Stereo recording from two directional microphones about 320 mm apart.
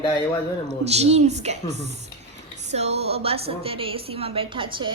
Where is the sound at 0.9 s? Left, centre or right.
Centre.